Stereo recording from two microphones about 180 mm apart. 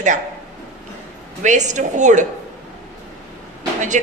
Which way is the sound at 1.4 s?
40° right (ahead or behind).